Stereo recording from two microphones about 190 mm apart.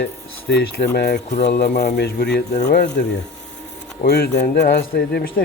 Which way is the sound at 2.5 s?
40° left (ahead or behind).